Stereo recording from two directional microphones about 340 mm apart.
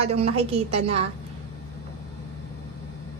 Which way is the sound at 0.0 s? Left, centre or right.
Centre.